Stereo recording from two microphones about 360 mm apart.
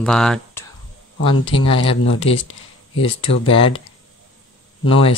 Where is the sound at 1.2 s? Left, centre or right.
Centre.